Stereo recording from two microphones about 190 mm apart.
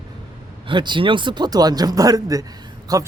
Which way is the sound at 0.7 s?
25° right (ahead or behind).